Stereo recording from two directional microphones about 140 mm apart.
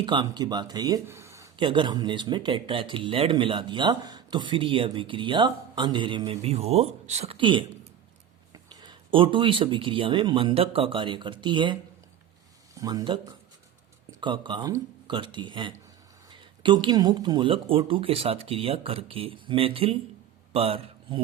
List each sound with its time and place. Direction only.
0.0 s speech: 35° right (ahead or behind)
1.0 s a sound: 20° right (ahead or behind)
1.5 s speech: 35° right (ahead or behind)
7.3 s a man's voice: 35° right (ahead or behind)